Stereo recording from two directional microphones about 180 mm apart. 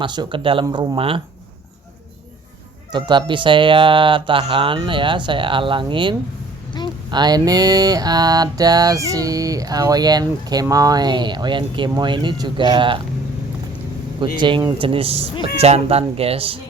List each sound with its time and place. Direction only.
0.0 s speech: 25° right (ahead or behind)
2.9 s speech: 25° right (ahead or behind)
14.2 s speech: 25° right (ahead or behind)